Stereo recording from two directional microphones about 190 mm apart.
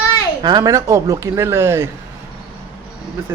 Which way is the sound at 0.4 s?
20° right (ahead or behind).